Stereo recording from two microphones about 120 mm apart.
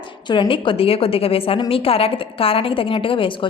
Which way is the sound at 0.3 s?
45° left (ahead or behind).